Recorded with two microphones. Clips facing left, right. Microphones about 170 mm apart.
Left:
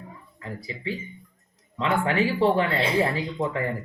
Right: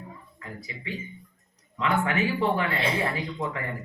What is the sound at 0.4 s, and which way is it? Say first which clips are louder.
Speech: left 6 dB; 30° left (ahead or behind).